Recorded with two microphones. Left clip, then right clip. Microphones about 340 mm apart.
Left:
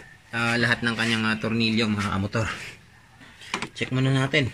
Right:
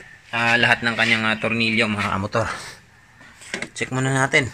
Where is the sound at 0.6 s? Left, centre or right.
Centre.